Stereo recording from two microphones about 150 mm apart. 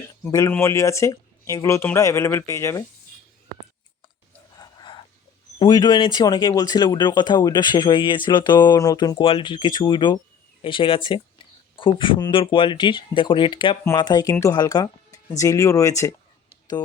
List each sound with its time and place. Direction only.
0.3 s speech: 20° left (ahead or behind)
4.5 s gasp: 30° left (ahead or behind)
5.5 s speech: 25° left (ahead or behind)